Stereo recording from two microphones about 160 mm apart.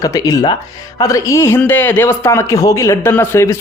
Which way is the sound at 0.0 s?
20° left (ahead or behind).